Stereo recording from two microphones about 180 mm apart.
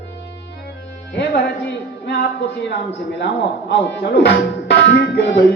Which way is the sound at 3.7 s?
70° left (ahead or behind).